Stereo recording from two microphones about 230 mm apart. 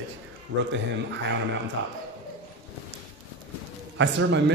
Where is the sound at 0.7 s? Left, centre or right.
Right.